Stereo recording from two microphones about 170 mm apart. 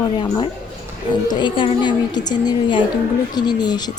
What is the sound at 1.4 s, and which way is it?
A woman's voice, 25° left (ahead or behind).